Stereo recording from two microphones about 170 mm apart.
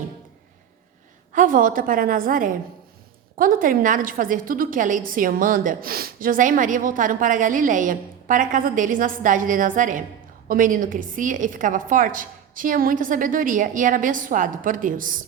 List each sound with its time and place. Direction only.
1.3 s a woman's voice: 50° right (ahead or behind)